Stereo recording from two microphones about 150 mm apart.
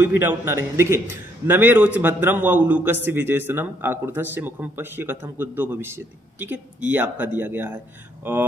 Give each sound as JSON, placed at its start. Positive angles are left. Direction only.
{"t": 0.0, "sound": "a man's voice", "side_deg": -15}